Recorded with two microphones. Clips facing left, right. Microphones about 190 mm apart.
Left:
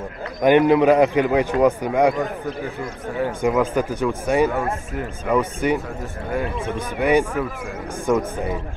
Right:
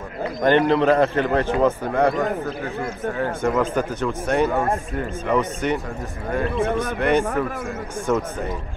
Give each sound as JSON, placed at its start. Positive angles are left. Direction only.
{"t": 0.4, "sound": "a man's voice", "side_deg": 10}
{"t": 7.0, "sound": "a man's voice", "side_deg": 10}